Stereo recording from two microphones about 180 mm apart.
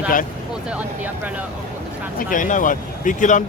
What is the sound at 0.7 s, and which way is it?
Speech, 10° right (ahead or behind).